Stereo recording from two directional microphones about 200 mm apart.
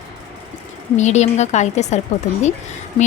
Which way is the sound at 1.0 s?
35° left (ahead or behind).